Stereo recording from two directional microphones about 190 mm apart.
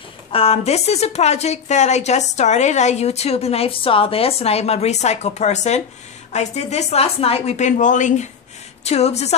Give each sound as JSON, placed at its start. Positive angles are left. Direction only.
{"t": 0.3, "sound": "a woman's voice", "side_deg": 30}